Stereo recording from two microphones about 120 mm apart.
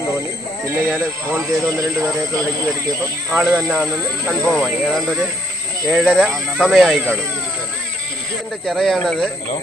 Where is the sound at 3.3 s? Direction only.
10° right (ahead or behind).